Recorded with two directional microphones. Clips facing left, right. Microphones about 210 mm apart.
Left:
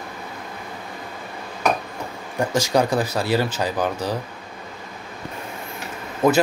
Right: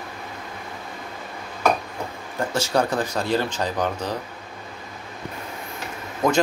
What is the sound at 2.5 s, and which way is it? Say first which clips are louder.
Speech: left 3 dB; 10° left (ahead or behind).